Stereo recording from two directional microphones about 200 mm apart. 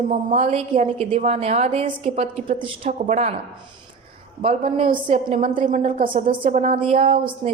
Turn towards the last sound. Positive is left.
turn(degrees=-30)  # may be behind; listen again after turning